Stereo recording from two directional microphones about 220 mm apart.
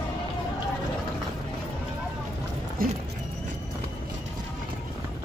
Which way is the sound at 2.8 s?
40° right (ahead or behind).